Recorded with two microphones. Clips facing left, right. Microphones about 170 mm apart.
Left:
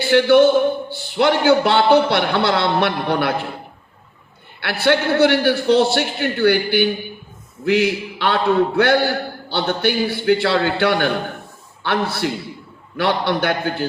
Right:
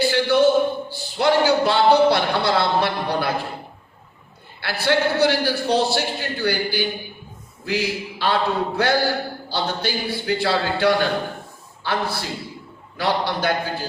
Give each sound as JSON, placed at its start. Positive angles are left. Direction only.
{"t": 0.1, "sound": "a man's voice", "side_deg": 65}
{"t": 4.6, "sound": "a man's voice", "side_deg": 65}